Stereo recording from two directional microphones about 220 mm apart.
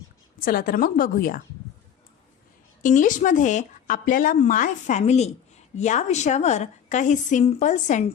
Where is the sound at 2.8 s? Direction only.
35° left (ahead or behind).